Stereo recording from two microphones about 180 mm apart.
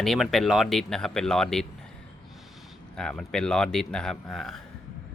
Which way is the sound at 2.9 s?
5° left (ahead or behind).